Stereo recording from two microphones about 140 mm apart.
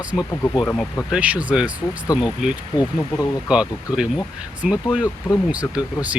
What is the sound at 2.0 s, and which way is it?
Speech, 25° left (ahead or behind).